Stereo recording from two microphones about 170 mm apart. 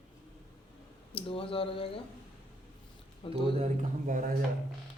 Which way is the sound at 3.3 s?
40° right (ahead or behind).